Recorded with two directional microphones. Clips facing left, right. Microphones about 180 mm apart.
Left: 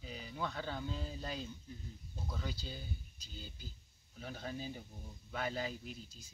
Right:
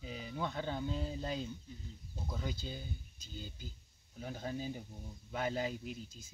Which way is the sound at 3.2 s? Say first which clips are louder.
Right 4 dB; 50° right (ahead or behind).